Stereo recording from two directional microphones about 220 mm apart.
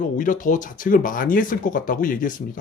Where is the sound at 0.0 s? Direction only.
35° left (ahead or behind).